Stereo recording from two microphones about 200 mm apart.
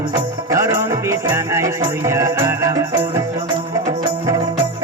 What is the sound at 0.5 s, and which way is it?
Music, 15° right (ahead or behind).